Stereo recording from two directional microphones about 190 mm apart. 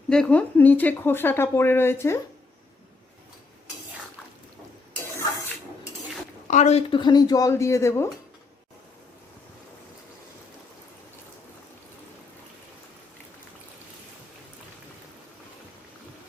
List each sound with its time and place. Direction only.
0.1 s speech: 5° left (ahead or behind)
6.5 s speech: 35° left (ahead or behind); by 8.1 s 15° left (ahead or behind)